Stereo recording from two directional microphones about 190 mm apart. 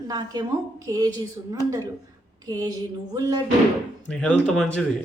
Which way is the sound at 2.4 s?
20° right (ahead or behind).